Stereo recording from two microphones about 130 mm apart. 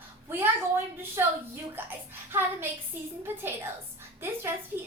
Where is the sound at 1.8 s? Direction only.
15° right (ahead or behind).